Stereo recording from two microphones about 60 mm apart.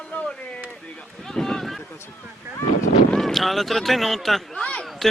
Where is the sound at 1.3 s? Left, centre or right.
Centre.